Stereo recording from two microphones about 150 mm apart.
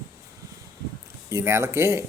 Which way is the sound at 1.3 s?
20° right (ahead or behind).